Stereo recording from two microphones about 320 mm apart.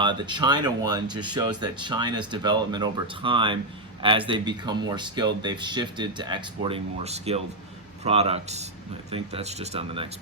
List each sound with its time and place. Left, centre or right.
0.0 s speech: centre